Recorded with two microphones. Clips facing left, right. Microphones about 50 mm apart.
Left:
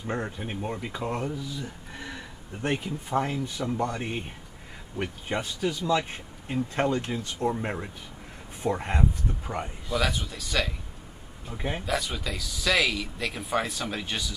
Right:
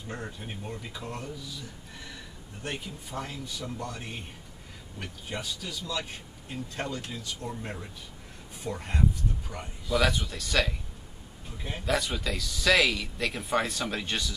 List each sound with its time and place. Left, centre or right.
0.0 s speech: left
9.9 s speech: centre
11.5 s speech: left
11.8 s speech: centre